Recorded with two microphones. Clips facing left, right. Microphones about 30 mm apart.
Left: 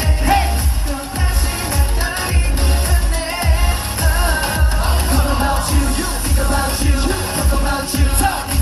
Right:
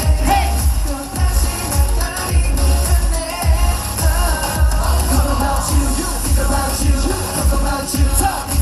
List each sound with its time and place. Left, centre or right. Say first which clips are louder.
0.3 s music: left 1 dB; centre
4.2 s music: left 2 dB; left